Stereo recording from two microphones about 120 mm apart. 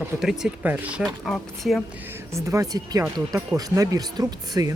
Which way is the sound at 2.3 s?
25° right (ahead or behind).